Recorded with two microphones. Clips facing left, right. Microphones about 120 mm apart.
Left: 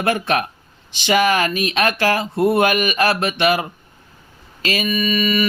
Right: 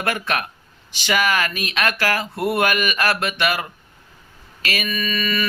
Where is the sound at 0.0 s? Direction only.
25° left (ahead or behind).